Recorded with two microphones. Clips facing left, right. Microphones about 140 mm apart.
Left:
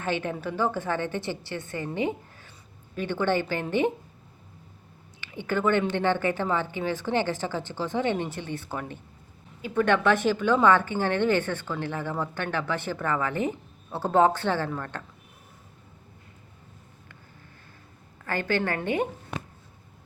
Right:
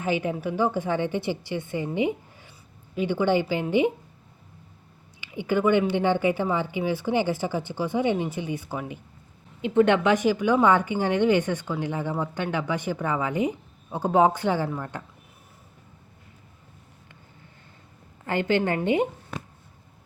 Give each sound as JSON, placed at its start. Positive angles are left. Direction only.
{"t": 0.0, "sound": "speech", "side_deg": -10}
{"t": 5.2, "sound": "speech", "side_deg": -15}
{"t": 9.6, "sound": "speech", "side_deg": -20}
{"t": 18.3, "sound": "a woman's voice", "side_deg": -20}